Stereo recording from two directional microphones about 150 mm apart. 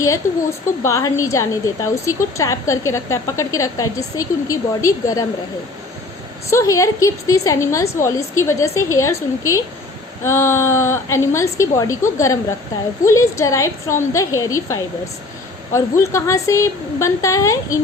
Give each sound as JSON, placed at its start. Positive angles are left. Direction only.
{"t": 0.8, "sound": "a woman's voice", "side_deg": 20}
{"t": 6.5, "sound": "a woman's voice", "side_deg": 20}